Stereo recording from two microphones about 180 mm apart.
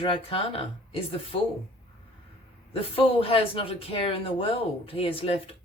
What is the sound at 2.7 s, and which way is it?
Speech, 30° left (ahead or behind).